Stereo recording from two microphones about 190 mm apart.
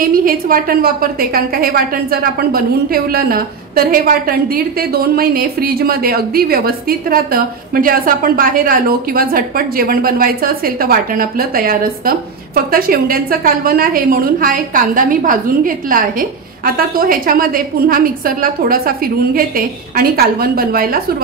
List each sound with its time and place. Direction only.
0.0 s a woman's voice: 50° right (ahead or behind)